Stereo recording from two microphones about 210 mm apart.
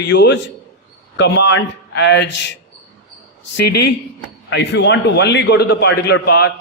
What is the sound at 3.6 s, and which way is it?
A man's voice, 55° left (ahead or behind).